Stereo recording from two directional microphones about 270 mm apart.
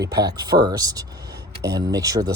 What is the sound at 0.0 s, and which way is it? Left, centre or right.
Speech, centre.